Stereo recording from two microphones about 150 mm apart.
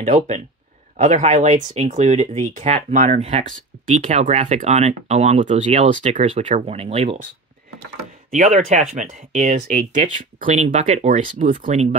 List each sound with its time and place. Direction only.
0.0 s speech: 55° right (ahead or behind)
8.3 s speech: 60° right (ahead or behind)